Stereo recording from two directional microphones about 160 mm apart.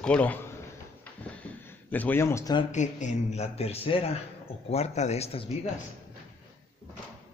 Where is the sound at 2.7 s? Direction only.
50° left (ahead or behind).